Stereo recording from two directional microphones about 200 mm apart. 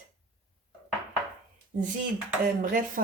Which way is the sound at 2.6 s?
45° right (ahead or behind).